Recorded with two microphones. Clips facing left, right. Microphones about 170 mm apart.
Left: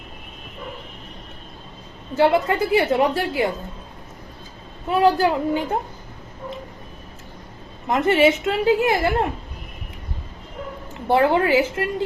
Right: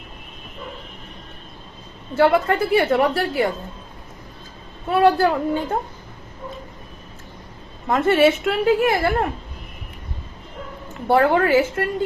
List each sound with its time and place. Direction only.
2.1 s a woman's voice: 20° left (ahead or behind)
4.9 s a woman's voice: 15° left (ahead or behind)
7.9 s a woman's voice: 20° left (ahead or behind)
11.1 s a woman's voice: 20° left (ahead or behind)